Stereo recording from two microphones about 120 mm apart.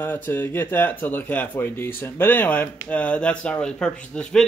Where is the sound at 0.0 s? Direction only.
15° left (ahead or behind).